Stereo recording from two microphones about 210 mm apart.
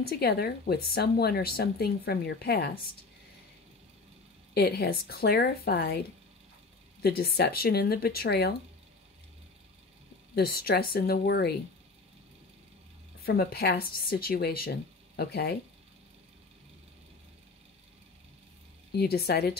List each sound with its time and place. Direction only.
0.0 s speech: 50° left (ahead or behind)
4.6 s speech: 50° left (ahead or behind)
10.3 s speech: 45° left (ahead or behind)
13.2 s speech: 45° left (ahead or behind)
18.9 s speech: 50° left (ahead or behind)